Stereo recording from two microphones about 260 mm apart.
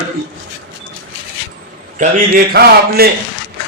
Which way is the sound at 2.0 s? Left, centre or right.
Right.